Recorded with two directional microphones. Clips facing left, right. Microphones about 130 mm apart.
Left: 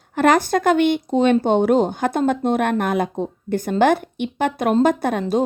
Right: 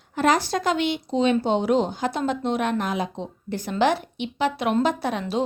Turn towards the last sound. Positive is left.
turn(degrees=45)  # may be behind; listen again after turning